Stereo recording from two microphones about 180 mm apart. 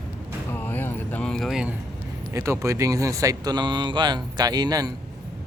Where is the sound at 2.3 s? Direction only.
15° right (ahead or behind).